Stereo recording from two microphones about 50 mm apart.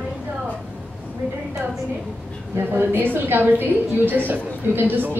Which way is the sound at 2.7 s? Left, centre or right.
Right.